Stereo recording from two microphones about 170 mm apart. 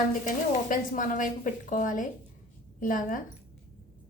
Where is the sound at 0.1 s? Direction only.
50° left (ahead or behind).